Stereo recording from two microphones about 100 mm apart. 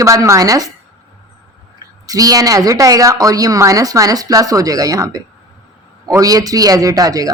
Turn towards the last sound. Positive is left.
turn(degrees=-35)  # may be behind; listen again after turning